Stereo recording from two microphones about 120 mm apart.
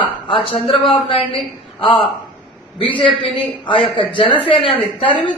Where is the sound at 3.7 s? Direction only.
45° left (ahead or behind).